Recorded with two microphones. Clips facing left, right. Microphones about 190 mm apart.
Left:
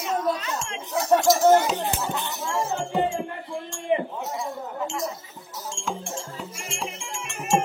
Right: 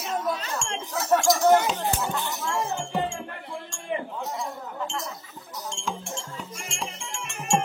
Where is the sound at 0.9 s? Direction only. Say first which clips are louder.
Left 3 dB; 25° left (ahead or behind).